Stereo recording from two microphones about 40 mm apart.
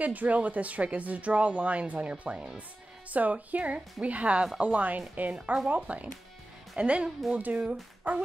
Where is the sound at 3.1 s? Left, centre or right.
Right.